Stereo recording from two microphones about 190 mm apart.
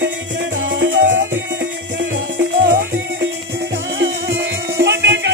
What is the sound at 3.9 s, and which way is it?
Music, 70° right (ahead or behind).